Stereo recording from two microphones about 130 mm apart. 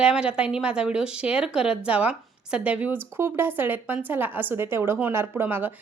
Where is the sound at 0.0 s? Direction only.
5° right (ahead or behind).